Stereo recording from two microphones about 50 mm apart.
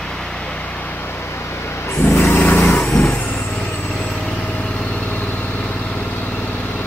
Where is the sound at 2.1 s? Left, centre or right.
Left.